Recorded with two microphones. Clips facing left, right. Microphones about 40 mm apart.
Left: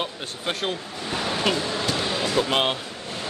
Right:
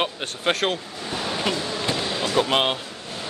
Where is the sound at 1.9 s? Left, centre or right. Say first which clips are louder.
Left 1 dB; centre.